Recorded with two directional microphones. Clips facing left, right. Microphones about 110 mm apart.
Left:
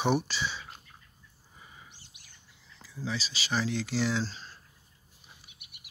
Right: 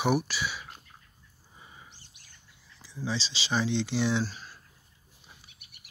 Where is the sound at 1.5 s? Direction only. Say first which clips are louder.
Right 1 dB; 20° right (ahead or behind).